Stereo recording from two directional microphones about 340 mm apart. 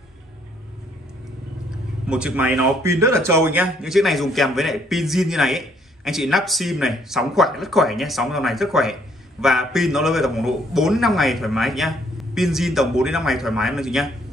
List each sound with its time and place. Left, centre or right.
2.0 s speech: centre